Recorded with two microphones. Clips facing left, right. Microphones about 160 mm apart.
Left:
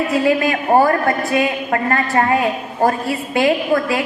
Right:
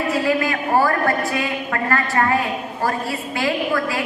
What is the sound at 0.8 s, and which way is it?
A woman's voice, 20° left (ahead or behind).